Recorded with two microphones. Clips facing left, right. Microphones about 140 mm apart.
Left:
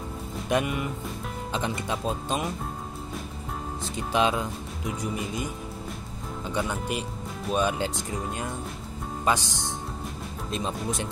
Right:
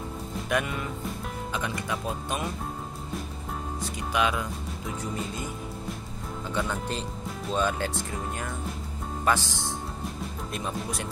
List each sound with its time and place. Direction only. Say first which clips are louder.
0.5 s speech: left 3 dB; 20° left (ahead or behind)
4.1 s speech: left 3 dB; 30° left (ahead or behind)
4.8 s speech: left 3 dB; 15° left (ahead or behind)
6.5 s speech: left 1 dB; 15° left (ahead or behind)